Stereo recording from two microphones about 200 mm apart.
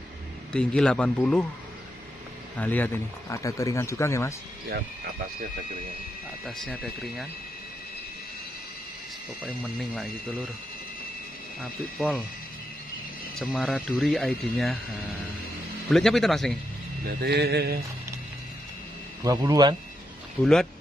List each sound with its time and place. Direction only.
0.5 s speech: 5° left (ahead or behind)
2.5 s speech: 10° left (ahead or behind)
6.4 s speech: centre (ahead or behind)
9.4 s speech: 5° left (ahead or behind)
11.6 s speech: centre (ahead or behind)
13.3 s speech: centre (ahead or behind)
15.9 s speech: centre (ahead or behind)
17.0 s mantra: 50° right (ahead or behind)
19.2 s speech: 20° right (ahead or behind)
20.4 s speech: 5° left (ahead or behind)